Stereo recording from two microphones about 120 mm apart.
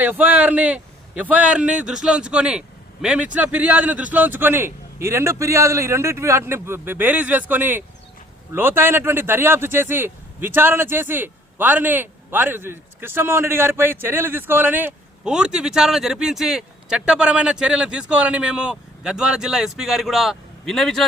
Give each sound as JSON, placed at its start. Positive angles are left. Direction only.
{"t": 0.0, "sound": "speech", "side_deg": -15}